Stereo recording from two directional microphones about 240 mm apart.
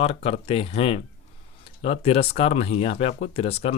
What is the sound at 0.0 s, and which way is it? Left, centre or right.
Speech, left.